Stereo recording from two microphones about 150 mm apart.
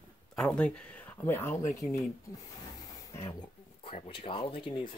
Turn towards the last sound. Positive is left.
turn(degrees=35)  # may be behind; listen again after turning